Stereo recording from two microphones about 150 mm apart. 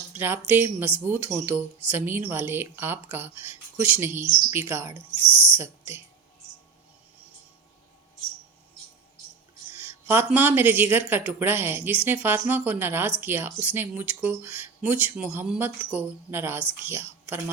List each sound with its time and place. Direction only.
0.1 s a woman's voice: 15° right (ahead or behind)
9.7 s a sound: 15° right (ahead or behind)
10.2 s a woman's voice: 15° right (ahead or behind)